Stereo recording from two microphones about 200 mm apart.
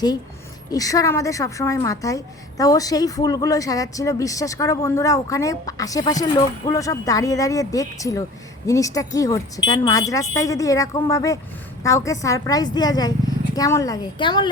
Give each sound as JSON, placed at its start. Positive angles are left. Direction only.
{"t": 0.7, "sound": "a woman's voice", "side_deg": 15}